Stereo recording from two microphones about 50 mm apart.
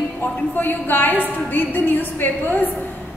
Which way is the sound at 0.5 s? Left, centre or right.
Left.